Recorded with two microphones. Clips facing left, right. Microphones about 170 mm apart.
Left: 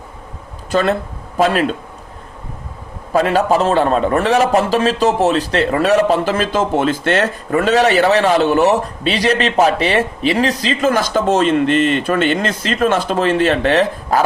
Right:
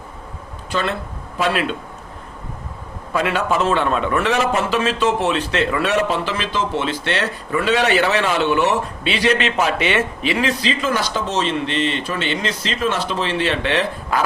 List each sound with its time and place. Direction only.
0.7 s a man's voice: 45° left (ahead or behind)
3.1 s a man's voice: 40° left (ahead or behind)